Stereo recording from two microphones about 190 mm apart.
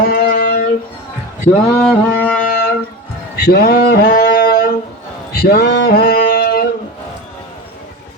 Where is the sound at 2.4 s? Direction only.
50° left (ahead or behind).